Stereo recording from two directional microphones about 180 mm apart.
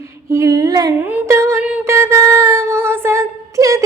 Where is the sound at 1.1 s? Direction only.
15° right (ahead or behind).